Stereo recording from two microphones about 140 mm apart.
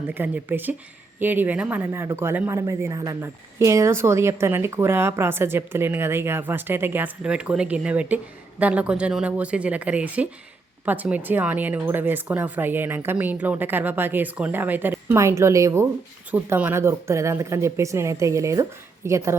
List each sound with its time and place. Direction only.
0.1 s a woman's voice: 15° right (ahead or behind)